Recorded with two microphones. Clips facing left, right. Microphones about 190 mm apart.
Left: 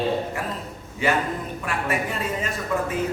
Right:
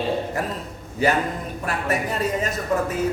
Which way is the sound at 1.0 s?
40° right (ahead or behind).